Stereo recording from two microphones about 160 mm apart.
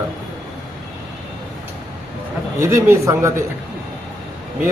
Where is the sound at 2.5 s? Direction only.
20° right (ahead or behind).